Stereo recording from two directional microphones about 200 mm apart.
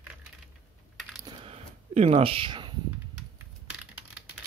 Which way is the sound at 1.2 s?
30° right (ahead or behind).